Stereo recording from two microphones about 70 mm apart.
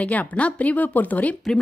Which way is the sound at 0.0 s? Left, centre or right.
Left.